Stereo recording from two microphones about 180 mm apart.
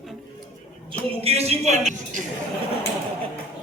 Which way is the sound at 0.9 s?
35° right (ahead or behind).